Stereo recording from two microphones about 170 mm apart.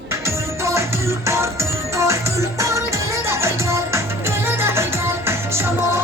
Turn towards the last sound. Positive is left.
turn(degrees=-15)  # may be behind; listen again after turning